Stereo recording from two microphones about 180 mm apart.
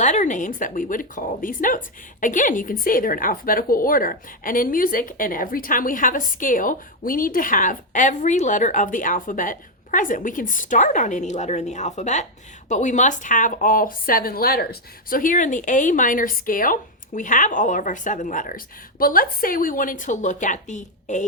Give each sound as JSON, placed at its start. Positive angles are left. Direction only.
{"t": 0.0, "sound": "a woman's voice", "side_deg": 40}